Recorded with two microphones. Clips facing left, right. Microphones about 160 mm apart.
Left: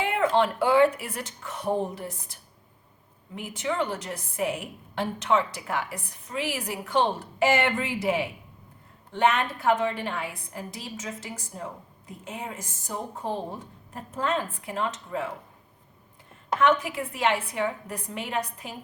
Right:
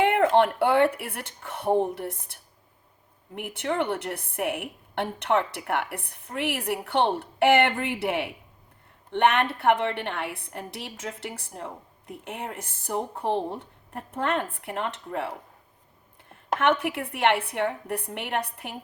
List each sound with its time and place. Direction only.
0.0 s a woman's voice: 60° right (ahead or behind)
16.3 s a woman's voice: 60° right (ahead or behind)